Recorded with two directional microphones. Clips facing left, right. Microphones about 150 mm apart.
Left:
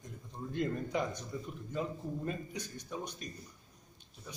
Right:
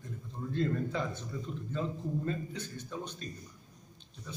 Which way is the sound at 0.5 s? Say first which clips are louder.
Right 2 dB; 15° left (ahead or behind).